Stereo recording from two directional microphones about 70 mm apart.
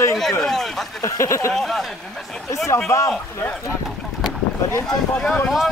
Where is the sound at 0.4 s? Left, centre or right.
Centre.